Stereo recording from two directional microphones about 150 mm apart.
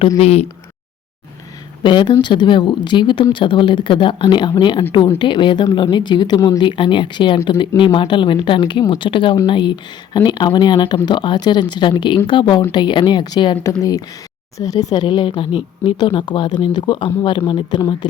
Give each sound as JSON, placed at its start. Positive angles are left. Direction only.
{"t": 0.2, "sound": "speech", "side_deg": 45}
{"t": 1.8, "sound": "speech", "side_deg": 30}
{"t": 14.6, "sound": "speech", "side_deg": 25}